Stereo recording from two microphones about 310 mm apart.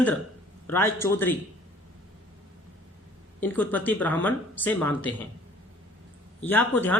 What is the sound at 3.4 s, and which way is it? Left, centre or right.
Speech, centre.